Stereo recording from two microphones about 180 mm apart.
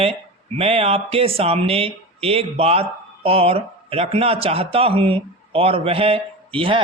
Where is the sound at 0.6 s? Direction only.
35° right (ahead or behind).